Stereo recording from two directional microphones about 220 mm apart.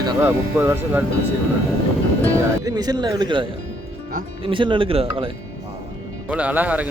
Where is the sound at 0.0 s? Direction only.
15° right (ahead or behind).